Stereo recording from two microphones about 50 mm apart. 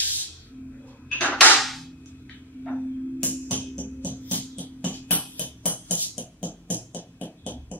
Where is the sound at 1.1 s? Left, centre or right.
Left.